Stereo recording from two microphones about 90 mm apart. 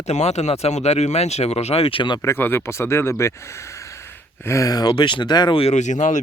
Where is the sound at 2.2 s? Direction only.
25° left (ahead or behind); by 4.9 s 45° left (ahead or behind).